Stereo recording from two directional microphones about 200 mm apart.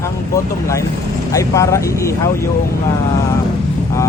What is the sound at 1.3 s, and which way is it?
Speech, 15° left (ahead or behind).